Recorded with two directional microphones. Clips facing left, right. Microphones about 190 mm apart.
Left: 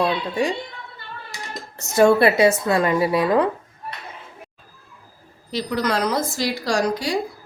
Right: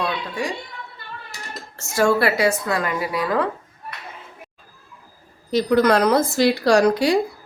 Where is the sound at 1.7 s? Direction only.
20° left (ahead or behind).